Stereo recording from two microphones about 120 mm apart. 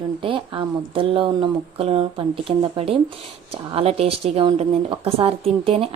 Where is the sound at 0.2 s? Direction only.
45° right (ahead or behind).